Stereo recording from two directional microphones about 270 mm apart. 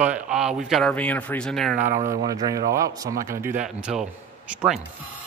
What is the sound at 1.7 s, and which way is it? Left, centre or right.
Speech, right.